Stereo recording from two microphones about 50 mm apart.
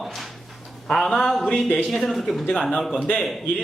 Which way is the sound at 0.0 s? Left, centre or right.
Centre.